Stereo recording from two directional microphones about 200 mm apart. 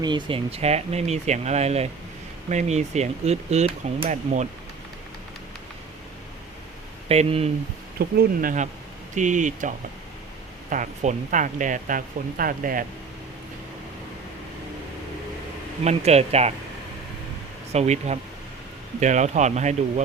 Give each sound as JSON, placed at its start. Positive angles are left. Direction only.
{"t": 0.0, "sound": "speech", "side_deg": -25}
{"t": 7.1, "sound": "speech", "side_deg": -30}
{"t": 7.9, "sound": "speech", "side_deg": -45}
{"t": 15.8, "sound": "speech", "side_deg": -30}
{"t": 17.7, "sound": "speech", "side_deg": -35}